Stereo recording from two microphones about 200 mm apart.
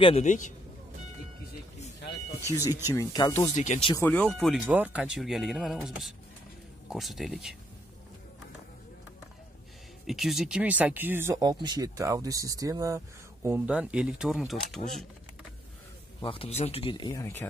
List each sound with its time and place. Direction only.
0.0 s a man's voice: 35° left (ahead or behind)
2.6 s speech: 10° right (ahead or behind)
2.9 s speech: 20° left (ahead or behind)
3.5 s a man's voice: 35° left (ahead or behind)
3.9 s speech: 10° left (ahead or behind)
10.0 s speech: centre (ahead or behind)
16.2 s speech: 25° left (ahead or behind)